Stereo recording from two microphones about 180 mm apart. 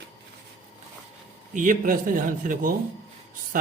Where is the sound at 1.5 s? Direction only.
50° right (ahead or behind).